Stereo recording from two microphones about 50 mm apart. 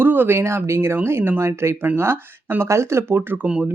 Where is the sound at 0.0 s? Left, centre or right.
Right.